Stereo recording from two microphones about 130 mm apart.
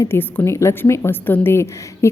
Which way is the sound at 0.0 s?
15° left (ahead or behind).